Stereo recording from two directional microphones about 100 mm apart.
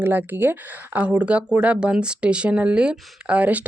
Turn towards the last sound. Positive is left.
turn(degrees=-15)  # may be behind; listen again after turning